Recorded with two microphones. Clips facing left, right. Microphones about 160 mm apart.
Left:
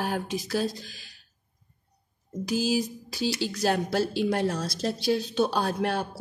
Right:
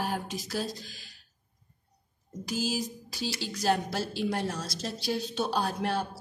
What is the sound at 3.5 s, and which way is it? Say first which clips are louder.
Speech: right 2 dB; 65° left (ahead or behind).